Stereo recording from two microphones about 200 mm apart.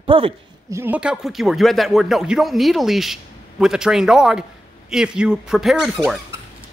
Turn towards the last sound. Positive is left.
turn(degrees=0)  # may be behind; listen again after turning